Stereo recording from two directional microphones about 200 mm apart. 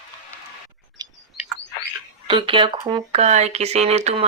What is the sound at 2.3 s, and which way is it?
Speech, 25° right (ahead or behind).